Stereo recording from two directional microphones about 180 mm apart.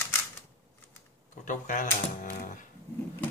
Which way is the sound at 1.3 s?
45° left (ahead or behind).